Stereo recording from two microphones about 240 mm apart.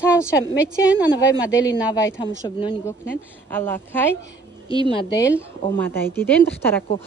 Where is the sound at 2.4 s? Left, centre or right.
Centre.